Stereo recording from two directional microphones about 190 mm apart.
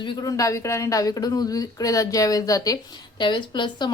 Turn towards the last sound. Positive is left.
turn(degrees=25)  # may be behind; listen again after turning